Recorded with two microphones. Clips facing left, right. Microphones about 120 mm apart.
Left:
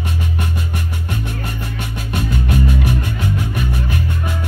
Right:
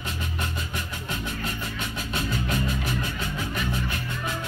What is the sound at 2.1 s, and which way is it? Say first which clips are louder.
Music: left 8 dB; 60° left (ahead or behind).